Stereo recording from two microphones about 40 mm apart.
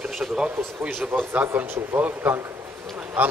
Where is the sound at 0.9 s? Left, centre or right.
Right.